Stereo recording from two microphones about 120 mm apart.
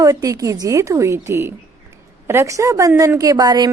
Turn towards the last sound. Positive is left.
turn(degrees=-35)  # may be behind; listen again after turning